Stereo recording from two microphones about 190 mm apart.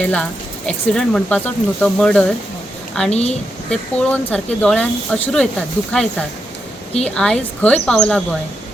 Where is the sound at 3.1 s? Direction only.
35° left (ahead or behind).